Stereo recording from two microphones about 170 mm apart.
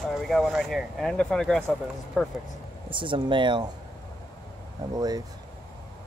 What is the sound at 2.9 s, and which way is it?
Speech, 30° right (ahead or behind).